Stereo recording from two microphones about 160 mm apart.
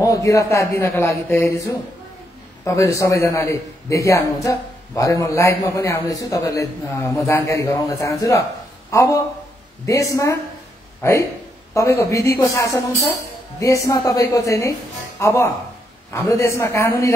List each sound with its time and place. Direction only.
0.0 s a man's voice: 20° left (ahead or behind)